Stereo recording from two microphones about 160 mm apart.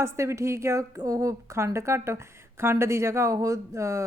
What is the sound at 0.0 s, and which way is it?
A woman's voice, 15° right (ahead or behind).